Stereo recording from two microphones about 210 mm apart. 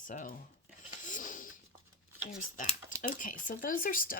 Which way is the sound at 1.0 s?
35° left (ahead or behind).